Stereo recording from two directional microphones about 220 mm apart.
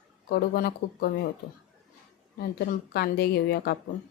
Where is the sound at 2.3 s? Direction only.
45° left (ahead or behind).